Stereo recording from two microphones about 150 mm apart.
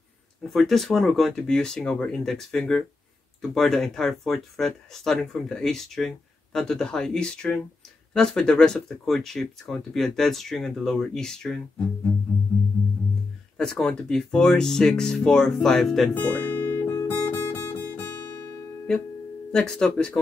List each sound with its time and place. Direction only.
0.5 s speech: centre (ahead or behind)
13.6 s speech: 5° left (ahead or behind)
18.1 s guitar: 25° left (ahead or behind)
19.5 s speech: 5° left (ahead or behind)